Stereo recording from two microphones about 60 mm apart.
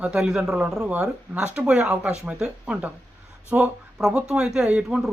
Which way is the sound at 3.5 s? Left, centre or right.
Right.